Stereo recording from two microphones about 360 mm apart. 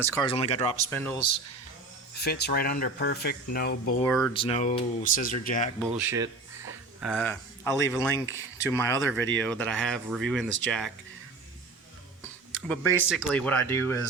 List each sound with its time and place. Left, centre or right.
0.0 s speech: centre
2.1 s speech: left
4.0 s speech: centre
4.4 s speech: centre
5.9 s speech: centre
12.9 s speech: centre